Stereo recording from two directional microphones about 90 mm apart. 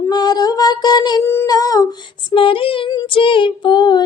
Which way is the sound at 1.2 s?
30° left (ahead or behind).